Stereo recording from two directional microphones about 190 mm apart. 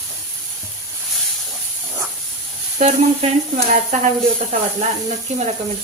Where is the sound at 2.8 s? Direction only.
35° right (ahead or behind).